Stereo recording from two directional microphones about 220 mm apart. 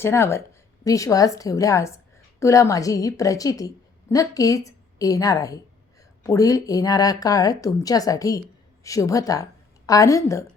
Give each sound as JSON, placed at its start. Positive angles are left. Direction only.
{"t": 0.0, "sound": "a woman's voice", "side_deg": 10}